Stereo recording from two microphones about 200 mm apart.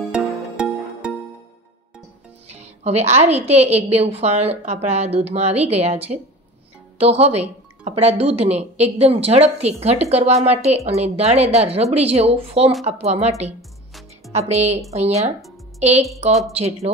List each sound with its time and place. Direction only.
0.1 s music: 5° right (ahead or behind)
2.4 s a woman's voice: 35° right (ahead or behind)
13.6 s music: centre (ahead or behind)
14.5 s a woman's voice: 35° right (ahead or behind)